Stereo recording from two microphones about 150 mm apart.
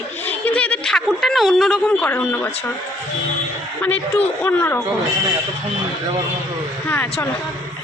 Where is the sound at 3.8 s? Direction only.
10° left (ahead or behind).